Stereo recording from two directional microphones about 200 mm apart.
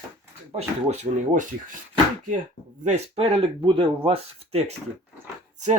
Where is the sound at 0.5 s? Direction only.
35° right (ahead or behind).